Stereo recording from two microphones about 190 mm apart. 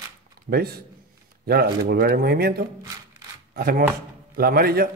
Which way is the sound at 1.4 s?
55° right (ahead or behind).